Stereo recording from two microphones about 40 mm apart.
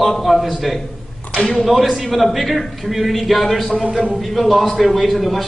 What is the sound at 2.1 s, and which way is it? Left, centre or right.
A man's voice, centre.